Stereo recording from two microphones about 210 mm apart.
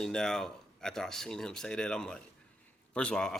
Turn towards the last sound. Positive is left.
turn(degrees=5)  # may be behind; listen again after turning